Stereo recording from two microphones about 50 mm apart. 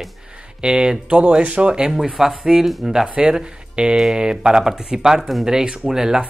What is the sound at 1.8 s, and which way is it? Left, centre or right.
Speech, centre.